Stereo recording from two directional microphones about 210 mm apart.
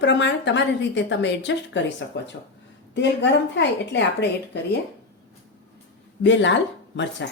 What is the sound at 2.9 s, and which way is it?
Speech, 55° left (ahead or behind).